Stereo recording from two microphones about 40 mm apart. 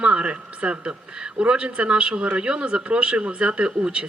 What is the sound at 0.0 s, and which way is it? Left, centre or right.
A woman's voice, right.